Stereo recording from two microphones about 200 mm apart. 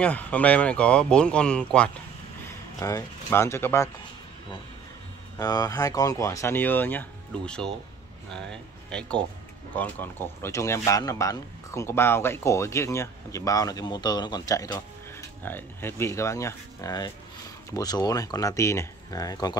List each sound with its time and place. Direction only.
0.0 s speech: 5° left (ahead or behind)
2.8 s speech: 15° left (ahead or behind)
5.4 s speech: 20° left (ahead or behind)